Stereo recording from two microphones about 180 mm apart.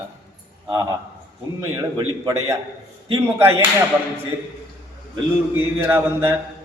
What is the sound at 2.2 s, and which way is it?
A man's voice, 15° right (ahead or behind).